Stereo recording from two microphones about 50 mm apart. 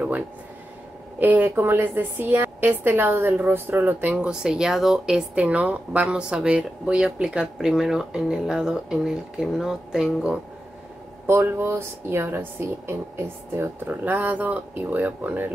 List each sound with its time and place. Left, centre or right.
1.2 s speech: right
1.5 s a woman's voice: right
4.2 s speech: centre
5.3 s speech: right; by 10.0 s centre
11.2 s speech: right
13.8 s speech: right